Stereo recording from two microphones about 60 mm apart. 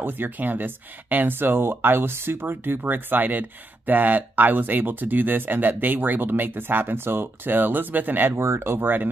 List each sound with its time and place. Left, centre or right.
0.0 s speech: right
8.4 s speech: right